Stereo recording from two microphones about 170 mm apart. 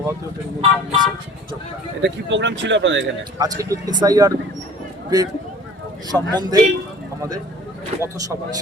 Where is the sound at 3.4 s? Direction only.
20° right (ahead or behind).